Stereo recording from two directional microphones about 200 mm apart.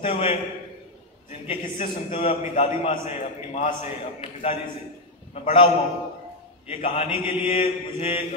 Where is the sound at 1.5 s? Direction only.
25° left (ahead or behind).